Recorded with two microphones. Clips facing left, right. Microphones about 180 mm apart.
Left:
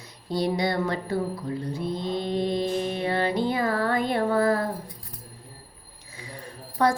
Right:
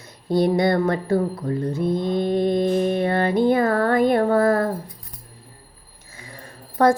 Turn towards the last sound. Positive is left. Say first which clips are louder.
# right 6 dB
turn(degrees=-50)  # may be behind; listen again after turning